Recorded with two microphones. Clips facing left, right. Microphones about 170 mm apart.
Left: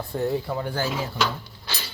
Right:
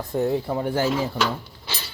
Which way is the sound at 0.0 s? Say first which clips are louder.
Right 3 dB; 20° right (ahead or behind).